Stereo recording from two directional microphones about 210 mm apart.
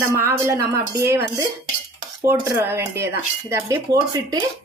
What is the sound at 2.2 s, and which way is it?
Speech, 10° right (ahead or behind).